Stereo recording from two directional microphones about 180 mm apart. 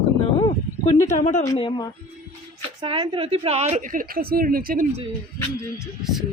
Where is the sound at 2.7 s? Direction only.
25° right (ahead or behind); by 4.9 s 50° right (ahead or behind).